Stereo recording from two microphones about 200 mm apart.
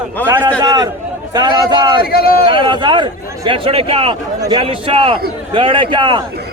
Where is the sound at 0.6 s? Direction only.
20° right (ahead or behind).